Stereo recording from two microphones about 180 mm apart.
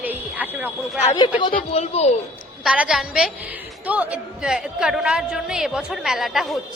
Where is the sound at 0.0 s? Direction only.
10° right (ahead or behind).